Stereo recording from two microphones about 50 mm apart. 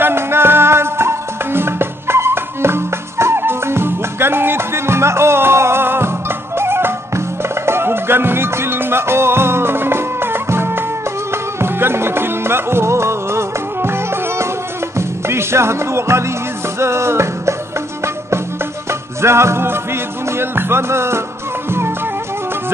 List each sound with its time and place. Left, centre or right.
0.0 s music: right
18.9 s music: right